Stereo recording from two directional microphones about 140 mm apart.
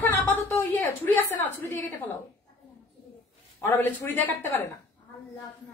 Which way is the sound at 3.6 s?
15° left (ahead or behind).